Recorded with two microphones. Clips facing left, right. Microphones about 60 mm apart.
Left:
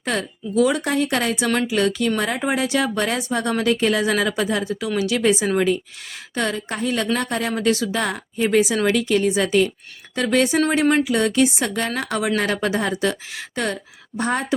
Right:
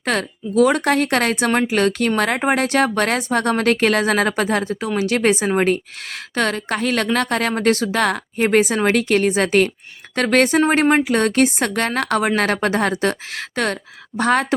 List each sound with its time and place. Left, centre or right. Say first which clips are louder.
0.0 s a woman's voice: right 3 dB; right
7.9 s a woman's voice: right 5 dB; right
14.2 s a woman's voice: right 5 dB; right